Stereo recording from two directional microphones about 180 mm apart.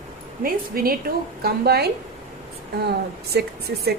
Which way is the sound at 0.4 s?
55° right (ahead or behind).